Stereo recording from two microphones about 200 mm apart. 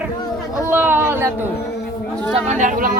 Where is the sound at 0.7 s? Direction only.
10° right (ahead or behind).